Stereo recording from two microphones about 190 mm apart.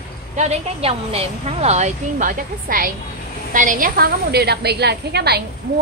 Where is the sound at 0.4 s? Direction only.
35° right (ahead or behind); by 5.4 s 60° right (ahead or behind).